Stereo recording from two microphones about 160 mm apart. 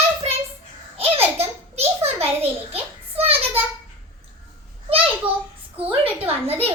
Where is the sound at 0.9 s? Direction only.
40° right (ahead or behind).